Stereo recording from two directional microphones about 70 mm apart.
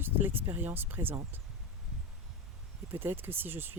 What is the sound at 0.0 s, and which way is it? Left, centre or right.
Speech, right.